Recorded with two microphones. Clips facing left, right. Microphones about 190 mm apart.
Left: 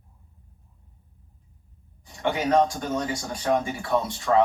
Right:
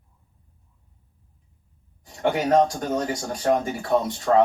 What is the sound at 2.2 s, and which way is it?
Speech, 45° right (ahead or behind).